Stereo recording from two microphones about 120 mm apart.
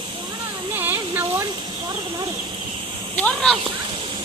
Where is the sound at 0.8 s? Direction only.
15° right (ahead or behind).